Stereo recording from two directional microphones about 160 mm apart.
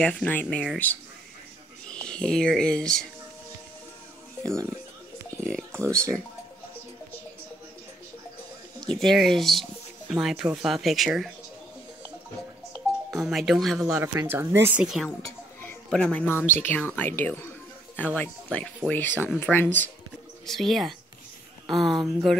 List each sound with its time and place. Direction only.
0.0 s speech: 10° left (ahead or behind)
1.9 s speech: 5° left (ahead or behind)
4.5 s speech: 20° right (ahead or behind)
5.4 s speech: 5° left (ahead or behind)
5.7 s speech: 15° right (ahead or behind)
9.0 s speech: centre (ahead or behind)
13.1 s speech: centre (ahead or behind)
13.8 s speech: 15° right (ahead or behind)
14.8 s speech: 5° right (ahead or behind)